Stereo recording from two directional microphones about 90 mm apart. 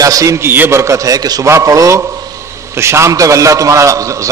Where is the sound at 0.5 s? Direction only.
25° right (ahead or behind).